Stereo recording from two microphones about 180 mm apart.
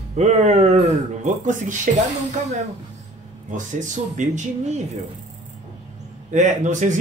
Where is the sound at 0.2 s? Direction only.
40° right (ahead or behind).